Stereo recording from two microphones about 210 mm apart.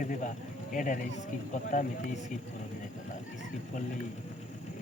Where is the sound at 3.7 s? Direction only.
35° left (ahead or behind).